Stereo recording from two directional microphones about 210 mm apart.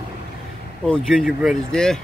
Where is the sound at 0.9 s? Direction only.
Centre (ahead or behind).